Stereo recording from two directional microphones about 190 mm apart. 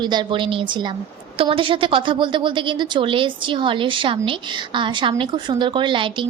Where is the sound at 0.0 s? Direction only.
25° right (ahead or behind).